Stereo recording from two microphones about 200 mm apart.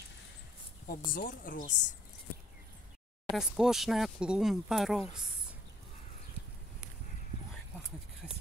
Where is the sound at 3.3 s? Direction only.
Centre (ahead or behind).